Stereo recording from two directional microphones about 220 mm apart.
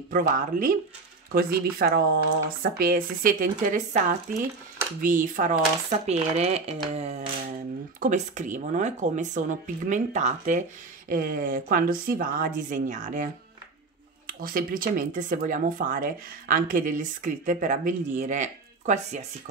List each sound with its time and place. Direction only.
0.1 s speech: 40° right (ahead or behind)